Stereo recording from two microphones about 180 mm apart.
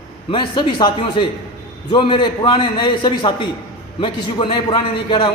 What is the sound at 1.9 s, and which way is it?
A man's voice, 25° left (ahead or behind).